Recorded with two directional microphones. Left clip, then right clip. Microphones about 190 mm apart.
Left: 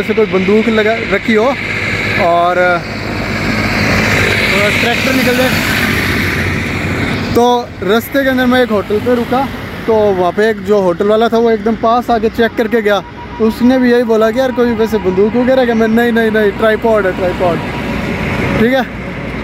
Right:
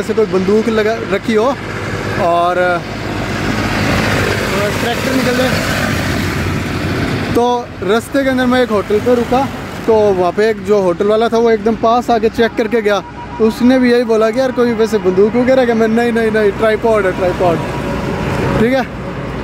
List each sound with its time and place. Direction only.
0.3 s speech: 25° right (ahead or behind)
0.7 s speech: 5° left (ahead or behind)
3.4 s vehicle: 30° left (ahead or behind)
4.1 s vehicle: 5° left (ahead or behind)
5.1 s vehicle: 55° right (ahead or behind)
7.3 s speech: 10° left (ahead or behind)
9.9 s speech: centre (ahead or behind)
11.4 s speech: 10° right (ahead or behind)
13.4 s speech: 10° right (ahead or behind)
18.6 s speech: 5° right (ahead or behind)